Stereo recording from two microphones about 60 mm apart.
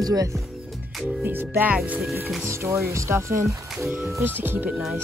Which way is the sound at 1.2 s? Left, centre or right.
Right.